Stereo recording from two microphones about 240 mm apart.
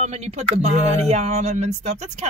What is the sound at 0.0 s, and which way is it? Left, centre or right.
Speech, right.